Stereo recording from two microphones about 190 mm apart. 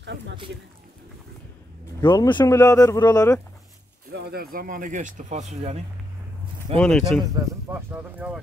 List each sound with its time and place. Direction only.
0.0 s a sound: 70° right (ahead or behind)
2.0 s speech: 25° left (ahead or behind)
4.1 s speech: 55° right (ahead or behind); by 5.8 s 35° right (ahead or behind)
6.8 s speech: centre (ahead or behind)